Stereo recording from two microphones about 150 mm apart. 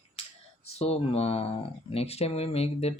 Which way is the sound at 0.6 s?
45° left (ahead or behind).